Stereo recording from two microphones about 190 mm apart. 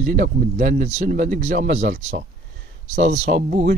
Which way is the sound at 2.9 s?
40° right (ahead or behind).